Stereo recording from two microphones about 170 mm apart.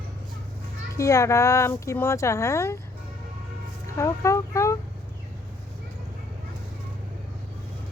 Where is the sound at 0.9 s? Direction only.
15° left (ahead or behind).